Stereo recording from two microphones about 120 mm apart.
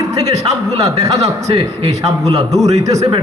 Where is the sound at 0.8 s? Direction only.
30° right (ahead or behind).